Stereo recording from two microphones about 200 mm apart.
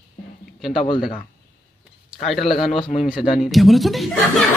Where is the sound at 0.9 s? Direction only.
50° left (ahead or behind).